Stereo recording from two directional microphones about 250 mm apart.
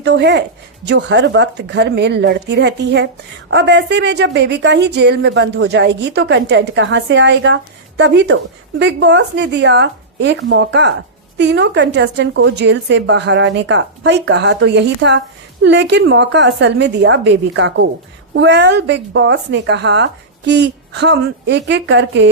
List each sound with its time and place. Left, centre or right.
0.0 s speech: right